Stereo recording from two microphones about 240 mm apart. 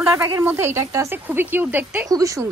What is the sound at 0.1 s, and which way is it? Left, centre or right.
Speech, centre.